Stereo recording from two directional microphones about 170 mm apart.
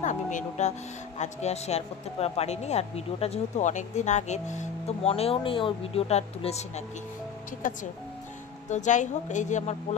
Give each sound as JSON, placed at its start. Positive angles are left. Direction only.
{"t": 0.0, "sound": "speech", "side_deg": 45}
{"t": 7.6, "sound": "a woman's voice", "side_deg": 50}